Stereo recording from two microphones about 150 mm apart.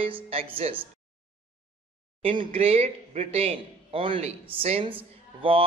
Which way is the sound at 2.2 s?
35° right (ahead or behind).